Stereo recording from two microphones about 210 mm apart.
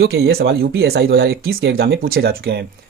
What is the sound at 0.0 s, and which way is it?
Speech, 50° right (ahead or behind).